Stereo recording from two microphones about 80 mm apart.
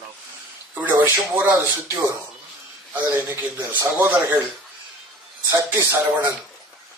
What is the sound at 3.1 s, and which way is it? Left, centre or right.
Speech, right.